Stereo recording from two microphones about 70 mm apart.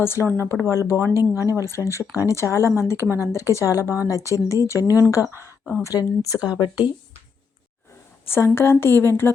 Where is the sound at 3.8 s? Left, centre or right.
Right.